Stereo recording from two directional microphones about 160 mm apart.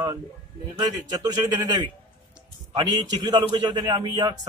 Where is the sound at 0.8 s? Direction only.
25° right (ahead or behind).